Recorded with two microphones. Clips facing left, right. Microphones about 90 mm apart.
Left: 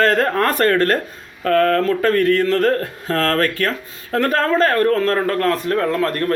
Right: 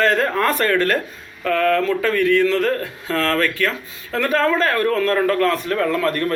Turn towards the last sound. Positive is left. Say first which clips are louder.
# left 1 dB
turn(degrees=40)  # may be behind; listen again after turning